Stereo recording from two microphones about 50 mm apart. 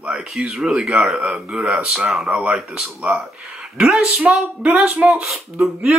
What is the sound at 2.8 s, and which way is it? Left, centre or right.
Speech, centre.